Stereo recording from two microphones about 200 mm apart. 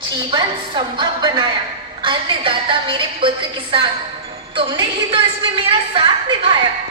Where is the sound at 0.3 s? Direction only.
25° right (ahead or behind).